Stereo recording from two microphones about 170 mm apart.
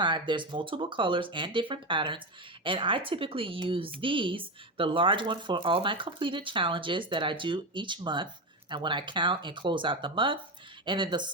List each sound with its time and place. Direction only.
0.0 s speech: 25° right (ahead or behind)